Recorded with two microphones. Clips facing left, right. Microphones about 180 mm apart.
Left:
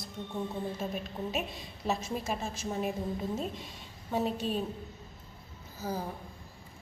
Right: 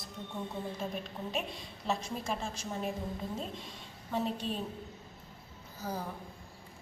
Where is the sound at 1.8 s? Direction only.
5° left (ahead or behind).